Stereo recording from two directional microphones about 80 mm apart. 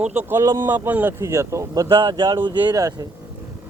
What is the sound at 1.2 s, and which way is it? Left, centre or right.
Speech, right.